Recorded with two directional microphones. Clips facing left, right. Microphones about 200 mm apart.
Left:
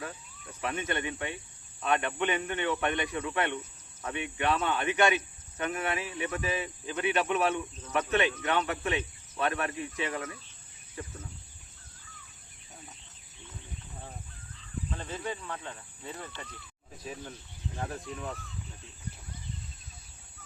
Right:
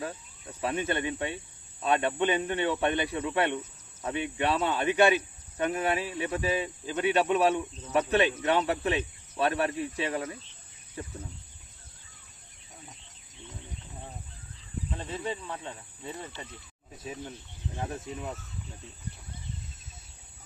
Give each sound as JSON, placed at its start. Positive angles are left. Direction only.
{"t": 0.0, "sound": "speech", "side_deg": -30}
{"t": 14.8, "sound": "speech", "side_deg": -20}